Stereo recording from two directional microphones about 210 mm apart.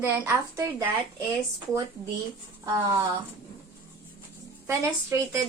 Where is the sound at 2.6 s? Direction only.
15° right (ahead or behind).